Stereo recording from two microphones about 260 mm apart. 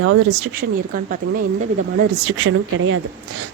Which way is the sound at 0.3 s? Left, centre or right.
Right.